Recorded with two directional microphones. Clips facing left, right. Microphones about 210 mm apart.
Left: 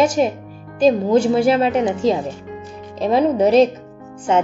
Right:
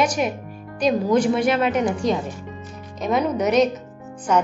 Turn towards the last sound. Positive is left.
turn(degrees=25)  # may be behind; listen again after turning